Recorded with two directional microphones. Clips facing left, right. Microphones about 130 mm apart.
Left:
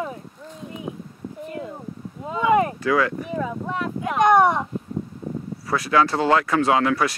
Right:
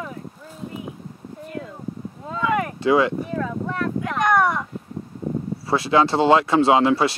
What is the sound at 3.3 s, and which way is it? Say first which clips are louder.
Speech: even; 15° left (ahead or behind).